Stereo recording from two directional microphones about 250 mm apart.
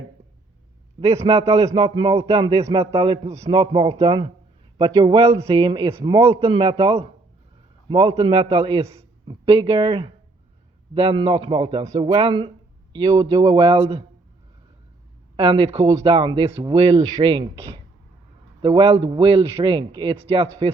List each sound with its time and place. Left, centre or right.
1.0 s a man's voice: right
15.4 s a man's voice: right